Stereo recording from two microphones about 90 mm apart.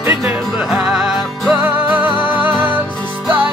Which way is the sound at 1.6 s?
20° right (ahead or behind).